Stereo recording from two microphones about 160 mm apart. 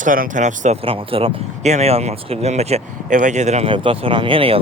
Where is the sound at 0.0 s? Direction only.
55° right (ahead or behind).